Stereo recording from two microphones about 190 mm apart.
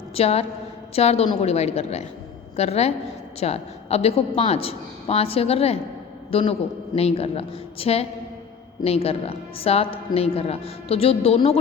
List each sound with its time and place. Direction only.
0.1 s a woman's voice: 30° left (ahead or behind)